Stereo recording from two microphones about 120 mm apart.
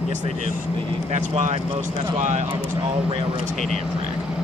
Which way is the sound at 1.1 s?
75° right (ahead or behind).